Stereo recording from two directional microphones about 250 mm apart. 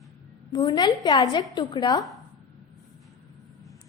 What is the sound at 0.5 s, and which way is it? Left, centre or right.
A woman's voice, centre.